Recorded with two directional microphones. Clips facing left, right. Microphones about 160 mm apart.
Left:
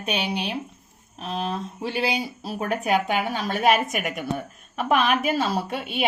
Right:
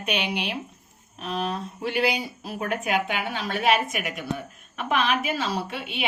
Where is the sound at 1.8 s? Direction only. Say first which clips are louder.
Right 1 dB; 30° left (ahead or behind).